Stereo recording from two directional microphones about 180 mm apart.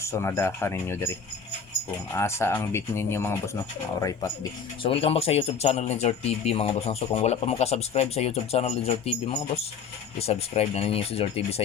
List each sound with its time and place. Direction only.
0.0 s speech: 15° left (ahead or behind)
2.1 s speech: 15° left (ahead or behind)
4.8 s speech: 30° left (ahead or behind)